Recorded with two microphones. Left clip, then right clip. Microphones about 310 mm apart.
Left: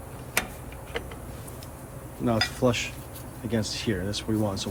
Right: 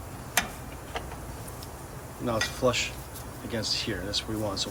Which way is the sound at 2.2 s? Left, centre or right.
Left.